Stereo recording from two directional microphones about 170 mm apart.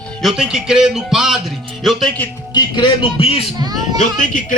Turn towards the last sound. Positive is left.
turn(degrees=50)  # may be behind; listen again after turning